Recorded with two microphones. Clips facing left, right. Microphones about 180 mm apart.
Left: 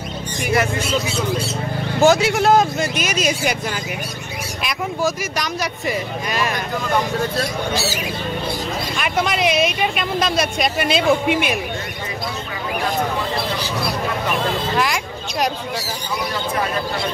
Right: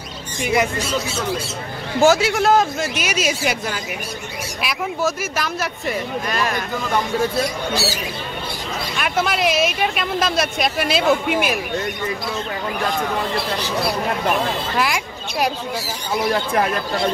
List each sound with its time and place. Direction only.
0.4 s speech: 20° right (ahead or behind)
2.0 s speech: 5° right (ahead or behind)
4.6 s speech: 5° right (ahead or behind)
8.9 s speech: centre (ahead or behind)
14.8 s speech: 5° right (ahead or behind)